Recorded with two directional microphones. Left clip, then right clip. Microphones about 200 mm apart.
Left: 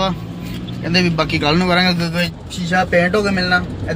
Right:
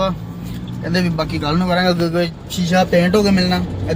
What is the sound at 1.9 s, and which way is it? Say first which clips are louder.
Speech: right 2 dB; 35° right (ahead or behind).